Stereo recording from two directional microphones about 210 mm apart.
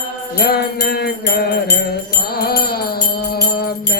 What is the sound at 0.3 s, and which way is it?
Music, 50° left (ahead or behind).